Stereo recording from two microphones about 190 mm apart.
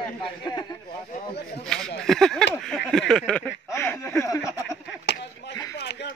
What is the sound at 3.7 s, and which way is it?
Speech, 15° left (ahead or behind).